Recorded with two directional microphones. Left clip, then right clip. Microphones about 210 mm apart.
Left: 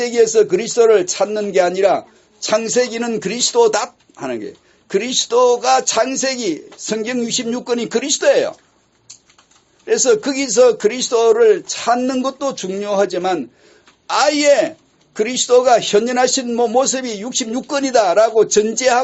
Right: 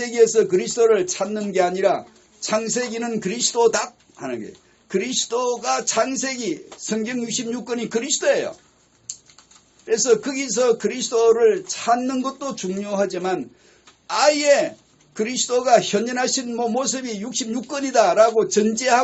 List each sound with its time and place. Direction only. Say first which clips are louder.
0.0 s a man's voice: left 3 dB; 40° left (ahead or behind)
9.8 s a man's voice: left 4 dB; 40° left (ahead or behind)